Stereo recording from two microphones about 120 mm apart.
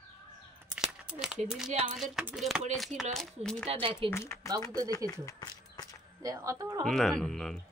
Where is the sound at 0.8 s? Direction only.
5° right (ahead or behind).